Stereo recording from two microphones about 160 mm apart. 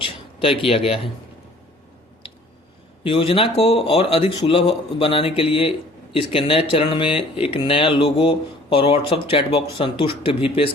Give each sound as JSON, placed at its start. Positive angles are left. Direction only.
{"t": 0.0, "sound": "speech", "side_deg": 35}
{"t": 3.0, "sound": "speech", "side_deg": 35}